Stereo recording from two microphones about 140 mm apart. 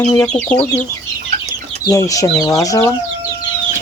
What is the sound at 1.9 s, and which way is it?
Speech, 25° left (ahead or behind).